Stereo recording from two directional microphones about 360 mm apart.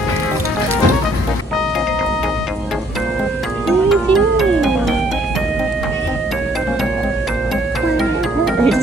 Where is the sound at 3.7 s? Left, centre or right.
Centre.